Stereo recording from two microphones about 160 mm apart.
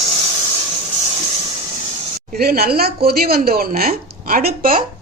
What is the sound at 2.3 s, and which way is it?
A woman's voice, 70° right (ahead or behind).